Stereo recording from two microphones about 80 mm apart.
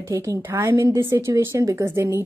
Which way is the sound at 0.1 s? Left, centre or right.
Right.